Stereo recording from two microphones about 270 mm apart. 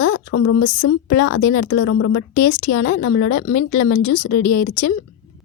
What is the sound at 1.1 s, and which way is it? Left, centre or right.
Speech, left.